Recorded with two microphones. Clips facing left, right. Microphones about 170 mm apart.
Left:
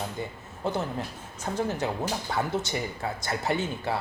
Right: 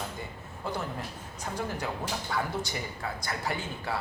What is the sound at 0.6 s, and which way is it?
A man's voice, 25° left (ahead or behind).